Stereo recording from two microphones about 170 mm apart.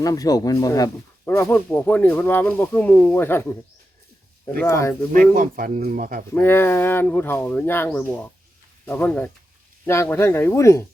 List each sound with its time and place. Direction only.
0.0 s speech: 20° left (ahead or behind)
4.6 s speech: 15° left (ahead or behind)
5.3 s a man's voice: 55° right (ahead or behind)
6.3 s speech: 15° left (ahead or behind)